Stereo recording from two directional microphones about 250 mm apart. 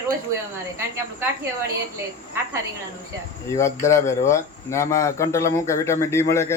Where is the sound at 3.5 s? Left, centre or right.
Centre.